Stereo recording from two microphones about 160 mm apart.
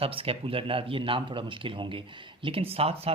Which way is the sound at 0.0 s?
35° right (ahead or behind).